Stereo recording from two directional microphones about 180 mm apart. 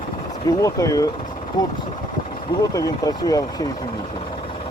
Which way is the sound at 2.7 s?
20° left (ahead or behind).